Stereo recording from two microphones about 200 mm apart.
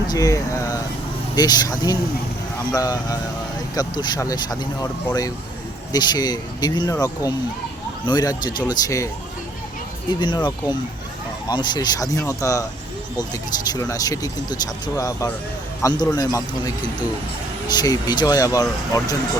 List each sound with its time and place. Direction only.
0.1 s speech: 15° left (ahead or behind)
10.1 s speech: 25° left (ahead or behind)